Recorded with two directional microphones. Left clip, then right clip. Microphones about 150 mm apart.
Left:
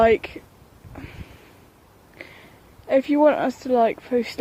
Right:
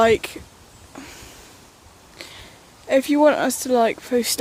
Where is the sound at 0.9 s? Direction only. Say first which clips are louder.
Right 2 dB; 30° right (ahead or behind).